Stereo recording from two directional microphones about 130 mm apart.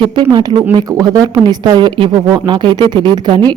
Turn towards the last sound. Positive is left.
turn(degrees=-35)  # may be behind; listen again after turning